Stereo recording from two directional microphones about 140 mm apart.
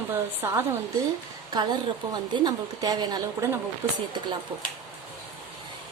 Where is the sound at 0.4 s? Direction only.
20° right (ahead or behind).